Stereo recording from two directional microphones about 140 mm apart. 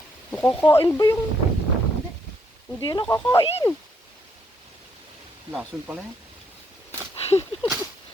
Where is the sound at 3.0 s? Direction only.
15° left (ahead or behind).